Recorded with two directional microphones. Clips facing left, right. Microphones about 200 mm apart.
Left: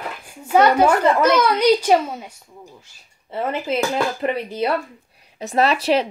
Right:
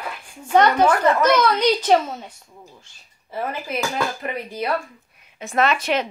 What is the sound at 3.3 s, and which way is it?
Dishes, 25° left (ahead or behind).